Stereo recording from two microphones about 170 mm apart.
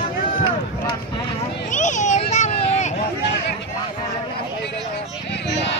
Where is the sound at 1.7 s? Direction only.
45° left (ahead or behind).